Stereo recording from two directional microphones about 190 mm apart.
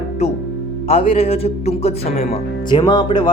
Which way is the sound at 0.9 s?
30° left (ahead or behind).